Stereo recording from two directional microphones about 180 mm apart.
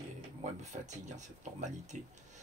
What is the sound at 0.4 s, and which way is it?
Speech, 40° right (ahead or behind).